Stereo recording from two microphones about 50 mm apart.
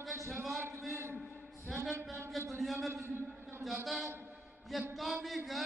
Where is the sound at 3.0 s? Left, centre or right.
Right.